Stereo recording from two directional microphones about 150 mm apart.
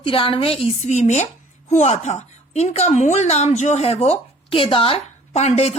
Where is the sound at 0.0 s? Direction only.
35° left (ahead or behind).